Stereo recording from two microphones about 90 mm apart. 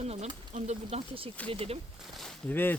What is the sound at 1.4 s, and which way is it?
Speech, 90° right.